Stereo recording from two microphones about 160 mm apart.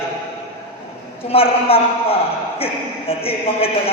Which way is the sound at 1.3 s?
35° left (ahead or behind).